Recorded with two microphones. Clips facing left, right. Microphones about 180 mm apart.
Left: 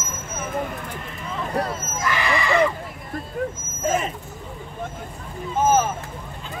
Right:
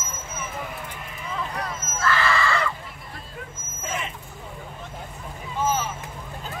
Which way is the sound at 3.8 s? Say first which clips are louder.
Left 9 dB; 40° left (ahead or behind).